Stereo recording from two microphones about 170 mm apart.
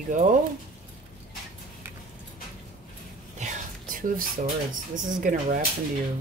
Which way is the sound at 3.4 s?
50° right (ahead or behind).